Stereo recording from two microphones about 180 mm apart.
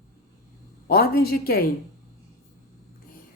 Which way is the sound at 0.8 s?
55° left (ahead or behind).